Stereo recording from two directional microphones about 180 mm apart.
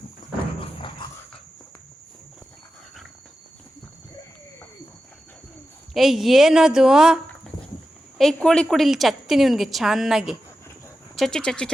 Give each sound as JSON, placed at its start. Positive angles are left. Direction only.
{"t": 0.6, "sound": "dog", "side_deg": 25}
{"t": 5.9, "sound": "a woman's voice", "side_deg": 0}